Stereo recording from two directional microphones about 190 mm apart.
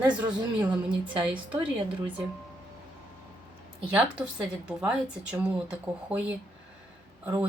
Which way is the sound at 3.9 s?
5° right (ahead or behind).